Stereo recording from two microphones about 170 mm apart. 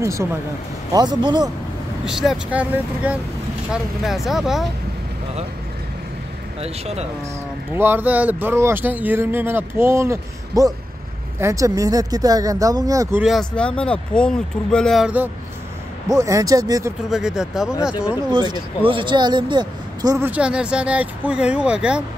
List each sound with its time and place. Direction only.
0.0 s speech: 15° right (ahead or behind)
2.0 s speech: 5° right (ahead or behind)
6.6 s speech: 40° right (ahead or behind)
7.7 s speech: 10° right (ahead or behind)
13.2 s speech: centre (ahead or behind)
16.1 s speech: 20° right (ahead or behind)
17.1 s speech: 5° right (ahead or behind)
18.3 s speech: 25° right (ahead or behind)
20.2 s speech: 5° right (ahead or behind)